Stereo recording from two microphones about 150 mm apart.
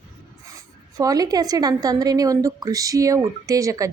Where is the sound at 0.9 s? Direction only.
25° right (ahead or behind).